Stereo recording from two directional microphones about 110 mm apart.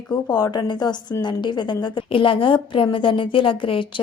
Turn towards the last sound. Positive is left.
turn(degrees=50)  # may be behind; listen again after turning